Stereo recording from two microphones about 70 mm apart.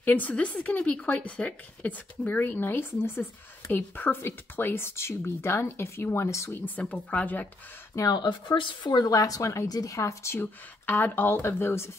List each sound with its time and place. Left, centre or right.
0.0 s speech: left
6.5 s speech: left
8.1 s speech: left
8.8 s speech: left
9.7 s speech: left
9.9 s speech: left
10.4 s speech: left